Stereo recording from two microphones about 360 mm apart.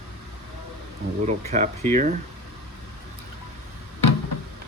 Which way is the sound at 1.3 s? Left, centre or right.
Centre.